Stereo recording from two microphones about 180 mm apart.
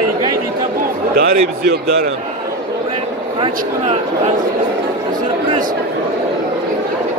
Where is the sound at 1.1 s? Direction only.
60° right (ahead or behind).